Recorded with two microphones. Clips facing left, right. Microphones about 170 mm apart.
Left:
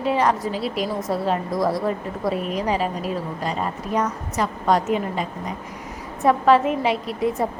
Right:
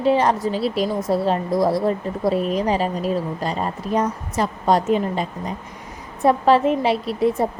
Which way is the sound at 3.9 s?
30° right (ahead or behind).